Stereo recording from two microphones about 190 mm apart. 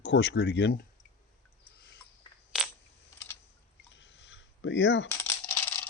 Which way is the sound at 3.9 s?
70° left (ahead or behind).